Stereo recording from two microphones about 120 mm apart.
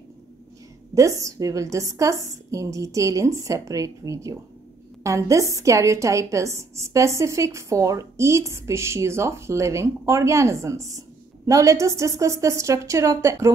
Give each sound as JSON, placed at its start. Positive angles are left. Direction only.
{"t": 0.9, "sound": "a woman's voice", "side_deg": -25}